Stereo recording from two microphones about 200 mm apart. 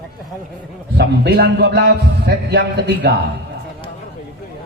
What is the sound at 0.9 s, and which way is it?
A man's voice, 55° right (ahead or behind).